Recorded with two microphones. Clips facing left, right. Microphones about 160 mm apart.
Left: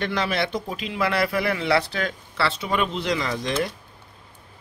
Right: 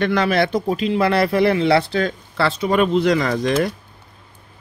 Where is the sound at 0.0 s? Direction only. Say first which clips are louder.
Right 7 dB; 50° right (ahead or behind).